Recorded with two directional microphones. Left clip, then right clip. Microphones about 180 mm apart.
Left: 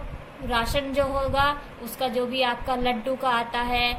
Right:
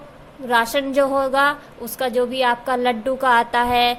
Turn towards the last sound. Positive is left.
turn(degrees=-50)  # may be behind; listen again after turning